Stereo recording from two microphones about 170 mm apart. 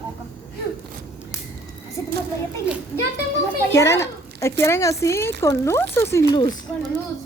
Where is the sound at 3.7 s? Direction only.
15° left (ahead or behind).